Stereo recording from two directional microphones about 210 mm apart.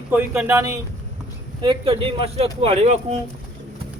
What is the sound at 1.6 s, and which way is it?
Speech, 25° right (ahead or behind).